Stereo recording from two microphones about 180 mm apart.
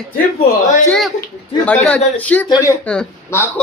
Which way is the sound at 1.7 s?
10° left (ahead or behind).